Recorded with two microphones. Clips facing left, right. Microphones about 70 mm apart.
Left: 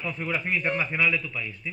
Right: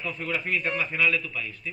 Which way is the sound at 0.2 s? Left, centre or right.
Centre.